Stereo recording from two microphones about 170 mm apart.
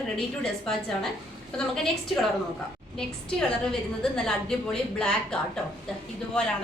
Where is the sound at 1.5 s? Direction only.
5° left (ahead or behind).